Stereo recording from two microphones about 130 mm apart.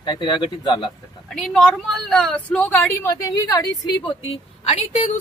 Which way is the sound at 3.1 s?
25° left (ahead or behind).